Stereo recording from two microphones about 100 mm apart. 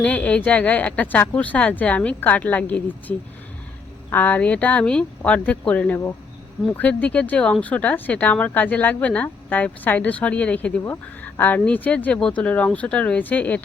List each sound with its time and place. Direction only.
0.0 s speech: 15° left (ahead or behind)